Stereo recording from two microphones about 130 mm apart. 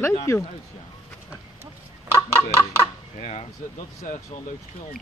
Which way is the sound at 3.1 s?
65° left (ahead or behind).